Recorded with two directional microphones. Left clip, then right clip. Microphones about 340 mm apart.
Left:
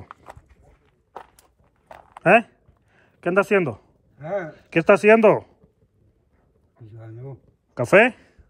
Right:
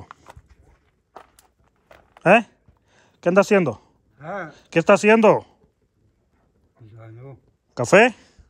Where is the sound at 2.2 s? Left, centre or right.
Centre.